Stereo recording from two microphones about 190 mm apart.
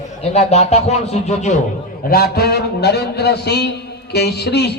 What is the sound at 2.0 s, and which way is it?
A man's voice, 55° left (ahead or behind).